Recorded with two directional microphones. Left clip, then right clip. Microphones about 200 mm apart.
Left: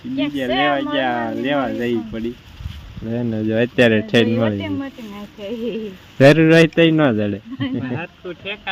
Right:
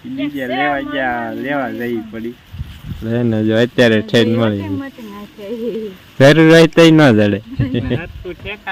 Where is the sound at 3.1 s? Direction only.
25° right (ahead or behind).